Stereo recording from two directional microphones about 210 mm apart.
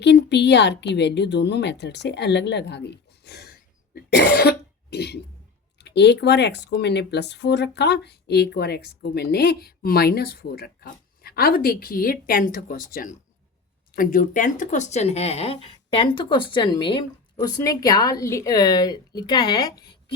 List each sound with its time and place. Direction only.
0.0 s speech: 55° left (ahead or behind)
3.9 s cough: 55° left (ahead or behind)
5.8 s speech: 55° left (ahead or behind); by 20.1 s 20° left (ahead or behind)